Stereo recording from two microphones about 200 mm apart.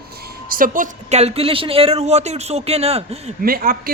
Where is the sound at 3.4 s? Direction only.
45° right (ahead or behind).